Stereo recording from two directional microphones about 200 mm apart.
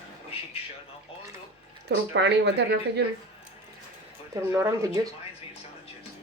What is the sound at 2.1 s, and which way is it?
Speech, 60° right (ahead or behind).